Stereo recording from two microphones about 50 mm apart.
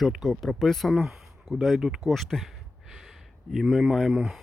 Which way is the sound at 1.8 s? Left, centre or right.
Centre.